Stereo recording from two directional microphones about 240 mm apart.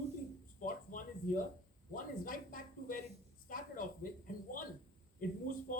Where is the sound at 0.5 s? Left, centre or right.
Left.